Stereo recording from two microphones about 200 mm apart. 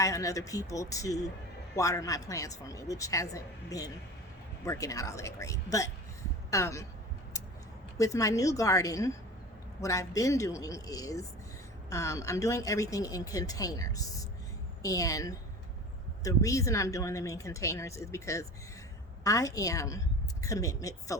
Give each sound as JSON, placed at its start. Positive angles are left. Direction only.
{"t": 0.0, "sound": "a woman's voice", "side_deg": 15}
{"t": 7.9, "sound": "a woman's voice", "side_deg": 15}